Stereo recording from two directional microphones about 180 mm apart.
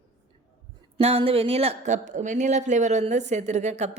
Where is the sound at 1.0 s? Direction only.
30° right (ahead or behind).